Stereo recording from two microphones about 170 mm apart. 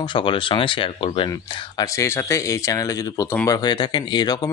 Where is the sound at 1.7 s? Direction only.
20° left (ahead or behind).